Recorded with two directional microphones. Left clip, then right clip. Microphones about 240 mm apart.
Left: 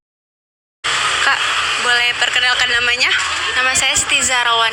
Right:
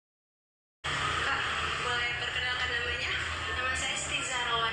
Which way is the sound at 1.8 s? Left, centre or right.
Left.